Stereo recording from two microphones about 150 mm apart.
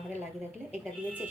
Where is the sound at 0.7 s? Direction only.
10° right (ahead or behind).